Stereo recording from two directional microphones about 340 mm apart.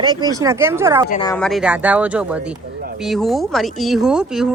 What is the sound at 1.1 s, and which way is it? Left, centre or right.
Speech, centre.